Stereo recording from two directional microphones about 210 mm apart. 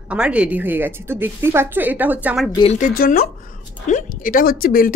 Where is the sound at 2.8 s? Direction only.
40° left (ahead or behind).